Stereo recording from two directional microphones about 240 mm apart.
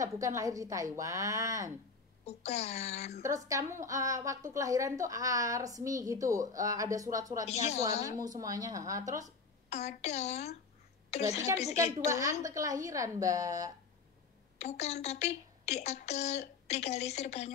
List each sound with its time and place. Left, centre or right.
0.0 s a woman's voice: centre
2.2 s speech: left
3.2 s a woman's voice: centre
7.4 s speech: left
8.2 s a woman's voice: centre
9.7 s speech: left
11.7 s a woman's voice: centre
14.6 s speech: left